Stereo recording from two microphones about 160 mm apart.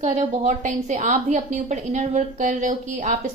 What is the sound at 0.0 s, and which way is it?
A woman's voice, 45° right (ahead or behind).